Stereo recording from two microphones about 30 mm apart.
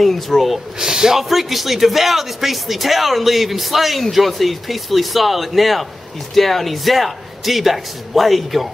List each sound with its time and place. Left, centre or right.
0.0 s speech: centre
0.7 s speech: centre
1.3 s speech: centre